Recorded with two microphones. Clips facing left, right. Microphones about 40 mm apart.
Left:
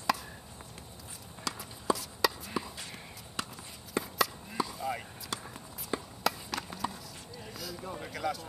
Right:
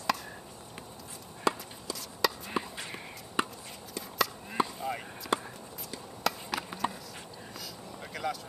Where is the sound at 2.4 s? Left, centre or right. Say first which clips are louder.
Right 3 dB; right.